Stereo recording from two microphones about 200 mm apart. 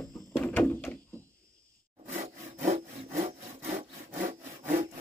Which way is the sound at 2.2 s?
35° right (ahead or behind).